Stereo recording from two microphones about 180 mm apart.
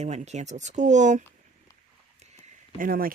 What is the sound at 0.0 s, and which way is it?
Speech, 40° right (ahead or behind).